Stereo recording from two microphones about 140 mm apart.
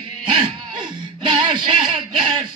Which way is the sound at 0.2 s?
35° right (ahead or behind).